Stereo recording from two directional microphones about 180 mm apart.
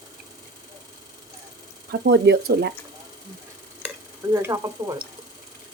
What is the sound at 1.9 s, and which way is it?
Speech, 60° right (ahead or behind).